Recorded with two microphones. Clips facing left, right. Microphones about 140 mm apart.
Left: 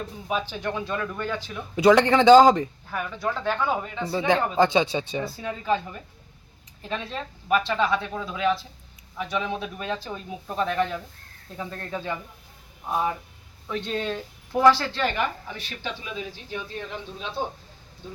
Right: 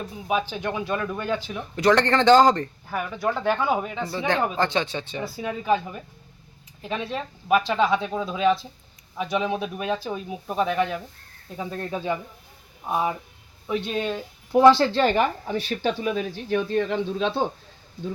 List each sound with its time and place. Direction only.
0.3 s speech: 15° right (ahead or behind)
1.7 s a man's voice: 10° left (ahead or behind)
2.9 s speech: 10° right (ahead or behind)
4.5 s a man's voice: 10° left (ahead or behind)
5.2 s speech: 15° right (ahead or behind)
14.5 s speech: 25° right (ahead or behind); by 17.4 s 90° right